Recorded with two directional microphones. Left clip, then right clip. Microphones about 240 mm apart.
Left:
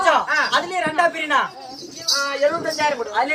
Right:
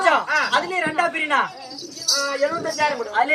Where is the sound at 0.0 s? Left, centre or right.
Centre.